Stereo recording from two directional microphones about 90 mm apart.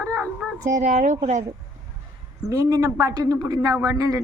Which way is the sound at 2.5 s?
35° right (ahead or behind).